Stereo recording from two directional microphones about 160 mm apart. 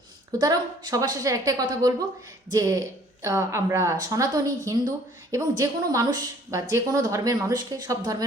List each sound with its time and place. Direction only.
0.3 s a woman's voice: 25° right (ahead or behind)